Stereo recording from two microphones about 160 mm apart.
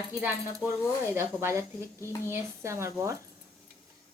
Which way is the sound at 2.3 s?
15° right (ahead or behind).